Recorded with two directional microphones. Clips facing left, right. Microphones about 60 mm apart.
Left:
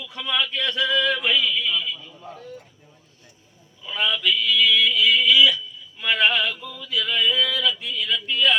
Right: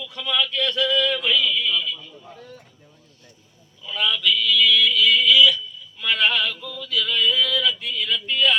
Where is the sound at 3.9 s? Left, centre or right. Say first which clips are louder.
Right 1 dB; left.